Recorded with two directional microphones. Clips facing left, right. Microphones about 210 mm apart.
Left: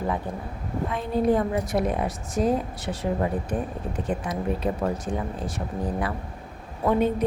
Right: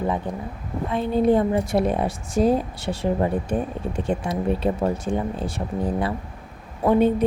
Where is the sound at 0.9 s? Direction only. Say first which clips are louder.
Right 4 dB; 25° right (ahead or behind).